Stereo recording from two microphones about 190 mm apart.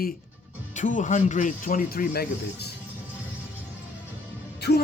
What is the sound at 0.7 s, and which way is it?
Speech, 40° left (ahead or behind).